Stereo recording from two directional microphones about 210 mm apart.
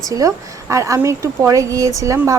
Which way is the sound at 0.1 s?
15° right (ahead or behind).